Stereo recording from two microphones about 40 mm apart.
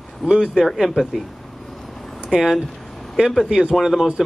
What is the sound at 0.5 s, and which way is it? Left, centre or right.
Speech, centre.